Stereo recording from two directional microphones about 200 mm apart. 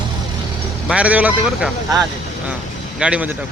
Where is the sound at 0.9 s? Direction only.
5° right (ahead or behind).